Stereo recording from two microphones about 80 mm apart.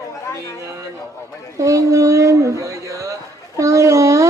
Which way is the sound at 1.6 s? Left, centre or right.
Right.